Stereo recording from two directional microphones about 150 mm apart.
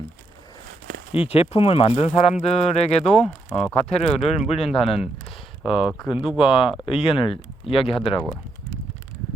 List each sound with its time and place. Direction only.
1.1 s speech: 40° left (ahead or behind)
3.1 s speech: 5° left (ahead or behind)
3.8 s speech: 45° left (ahead or behind)
6.1 s speech: 5° right (ahead or behind)
6.4 s speech: 35° left (ahead or behind)